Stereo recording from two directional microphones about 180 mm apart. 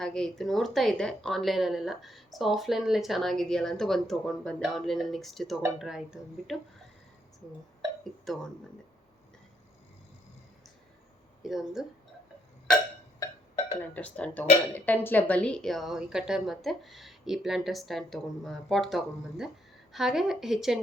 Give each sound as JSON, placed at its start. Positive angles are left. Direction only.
{"t": 0.0, "sound": "speech", "side_deg": 5}
{"t": 8.3, "sound": "speech", "side_deg": 0}
{"t": 11.4, "sound": "speech", "side_deg": 0}
{"t": 13.9, "sound": "speech", "side_deg": 10}